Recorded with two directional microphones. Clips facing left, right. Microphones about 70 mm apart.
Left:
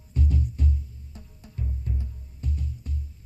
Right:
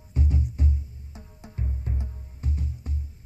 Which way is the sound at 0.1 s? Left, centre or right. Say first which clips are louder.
Even; right.